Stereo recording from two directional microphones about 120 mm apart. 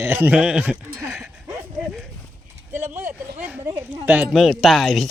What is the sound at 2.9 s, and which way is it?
Speech, 15° right (ahead or behind).